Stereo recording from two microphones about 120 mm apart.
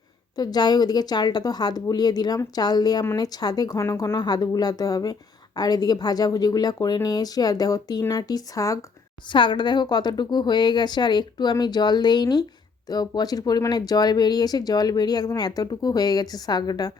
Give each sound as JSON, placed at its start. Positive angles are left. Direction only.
{"t": 0.3, "sound": "speech", "side_deg": 35}
{"t": 9.3, "sound": "speech", "side_deg": 40}